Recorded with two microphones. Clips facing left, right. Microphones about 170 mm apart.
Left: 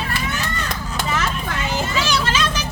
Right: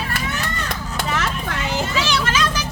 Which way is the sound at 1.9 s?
50° left (ahead or behind).